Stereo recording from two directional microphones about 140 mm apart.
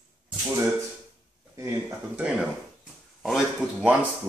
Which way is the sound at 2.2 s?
5° right (ahead or behind).